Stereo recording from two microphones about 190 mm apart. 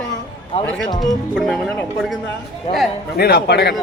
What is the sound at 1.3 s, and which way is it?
Speech, centre (ahead or behind).